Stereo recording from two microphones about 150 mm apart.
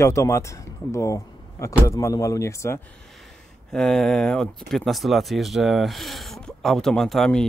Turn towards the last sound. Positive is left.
turn(degrees=5)  # may be behind; listen again after turning